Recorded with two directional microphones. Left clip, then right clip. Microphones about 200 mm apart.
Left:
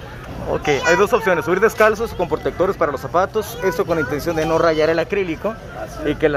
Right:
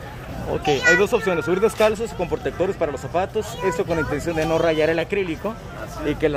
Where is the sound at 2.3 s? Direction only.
15° left (ahead or behind).